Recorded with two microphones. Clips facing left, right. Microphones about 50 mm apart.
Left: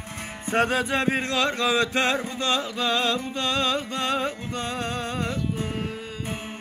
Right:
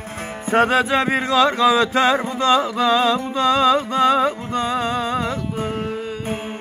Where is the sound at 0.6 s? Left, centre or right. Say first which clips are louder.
Right 6 dB; right.